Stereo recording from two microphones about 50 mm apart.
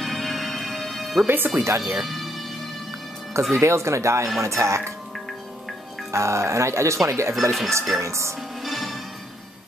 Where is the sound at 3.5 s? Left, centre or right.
Right.